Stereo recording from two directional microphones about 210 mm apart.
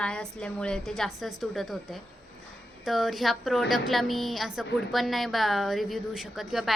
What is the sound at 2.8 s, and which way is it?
A woman's voice, centre (ahead or behind).